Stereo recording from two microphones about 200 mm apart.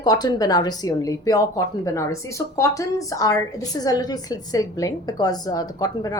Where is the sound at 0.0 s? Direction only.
20° left (ahead or behind).